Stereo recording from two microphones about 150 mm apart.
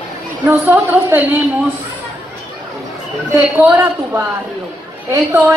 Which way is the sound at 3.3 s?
15° right (ahead or behind).